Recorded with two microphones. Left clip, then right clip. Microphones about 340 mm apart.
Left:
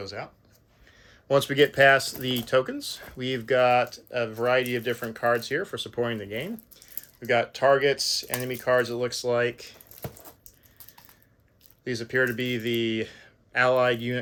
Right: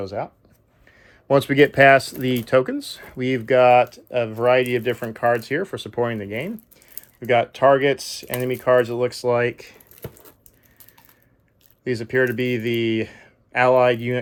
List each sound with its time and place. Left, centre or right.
0.2 s speech: right
0.9 s speech: centre
11.9 s speech: centre